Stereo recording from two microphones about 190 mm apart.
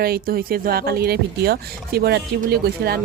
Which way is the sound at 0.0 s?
50° right (ahead or behind).